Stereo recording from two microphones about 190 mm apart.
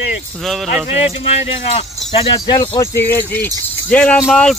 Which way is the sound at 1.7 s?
30° left (ahead or behind).